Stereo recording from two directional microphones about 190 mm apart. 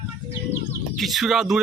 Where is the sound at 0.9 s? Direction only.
Centre (ahead or behind).